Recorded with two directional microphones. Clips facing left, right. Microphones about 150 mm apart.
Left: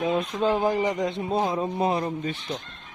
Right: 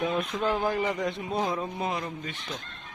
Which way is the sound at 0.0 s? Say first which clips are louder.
Left 4 dB; 25° left (ahead or behind).